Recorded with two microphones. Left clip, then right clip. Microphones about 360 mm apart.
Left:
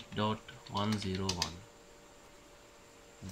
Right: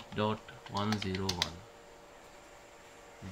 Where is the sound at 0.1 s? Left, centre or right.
Centre.